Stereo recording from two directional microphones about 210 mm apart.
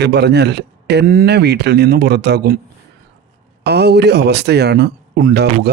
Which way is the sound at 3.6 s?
50° right (ahead or behind).